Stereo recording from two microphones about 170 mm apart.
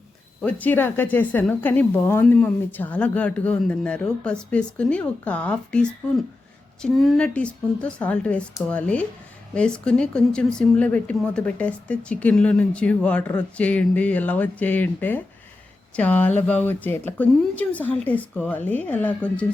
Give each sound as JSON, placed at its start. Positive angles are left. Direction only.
{"t": 0.4, "sound": "a woman's voice", "side_deg": 10}